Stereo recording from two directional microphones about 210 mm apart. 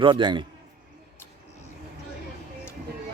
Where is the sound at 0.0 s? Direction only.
25° right (ahead or behind).